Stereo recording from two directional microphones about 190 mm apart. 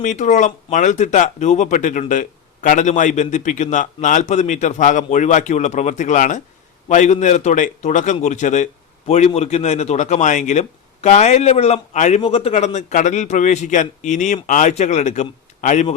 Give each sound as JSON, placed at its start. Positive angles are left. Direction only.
{"t": 0.0, "sound": "a man's voice", "side_deg": 40}